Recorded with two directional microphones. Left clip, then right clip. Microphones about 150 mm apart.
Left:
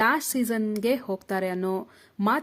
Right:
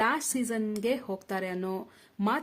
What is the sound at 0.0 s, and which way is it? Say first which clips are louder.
A woman's voice: left 5 dB; 25° left (ahead or behind).